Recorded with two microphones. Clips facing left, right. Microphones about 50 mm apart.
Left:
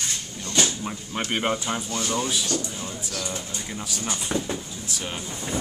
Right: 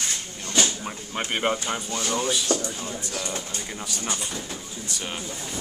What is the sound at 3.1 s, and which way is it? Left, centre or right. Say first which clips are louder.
Speech: even; right.